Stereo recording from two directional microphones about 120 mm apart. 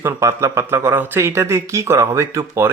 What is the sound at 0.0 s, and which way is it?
Speech, 25° right (ahead or behind).